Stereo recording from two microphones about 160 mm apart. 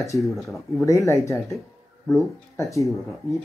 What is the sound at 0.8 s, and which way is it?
Speech, 20° left (ahead or behind).